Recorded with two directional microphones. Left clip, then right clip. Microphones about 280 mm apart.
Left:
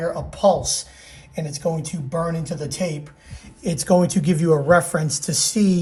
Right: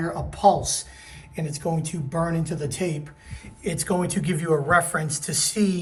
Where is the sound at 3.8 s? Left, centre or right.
Centre.